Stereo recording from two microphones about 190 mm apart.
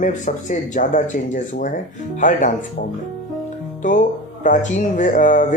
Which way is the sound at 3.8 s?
40° left (ahead or behind).